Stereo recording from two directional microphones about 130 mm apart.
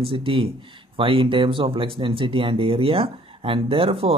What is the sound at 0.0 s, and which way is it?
Speech, 45° right (ahead or behind).